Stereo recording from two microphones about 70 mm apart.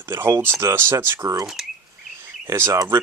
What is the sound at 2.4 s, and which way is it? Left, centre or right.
Speech, right.